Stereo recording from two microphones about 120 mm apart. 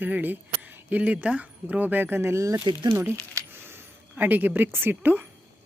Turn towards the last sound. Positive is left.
turn(degrees=-15)  # may be behind; listen again after turning